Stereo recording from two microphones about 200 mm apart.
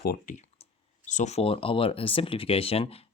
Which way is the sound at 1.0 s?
35° left (ahead or behind).